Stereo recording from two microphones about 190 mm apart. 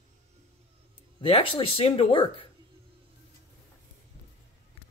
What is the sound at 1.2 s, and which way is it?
Speech, 30° left (ahead or behind).